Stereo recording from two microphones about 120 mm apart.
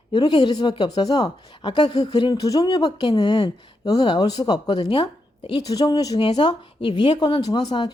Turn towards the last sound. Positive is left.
turn(degrees=35)  # may be behind; listen again after turning